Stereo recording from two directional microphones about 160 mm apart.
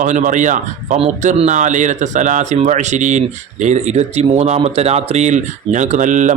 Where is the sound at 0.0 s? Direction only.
50° right (ahead or behind).